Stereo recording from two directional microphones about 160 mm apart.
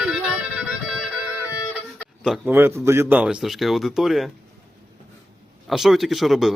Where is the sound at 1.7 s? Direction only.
5° right (ahead or behind).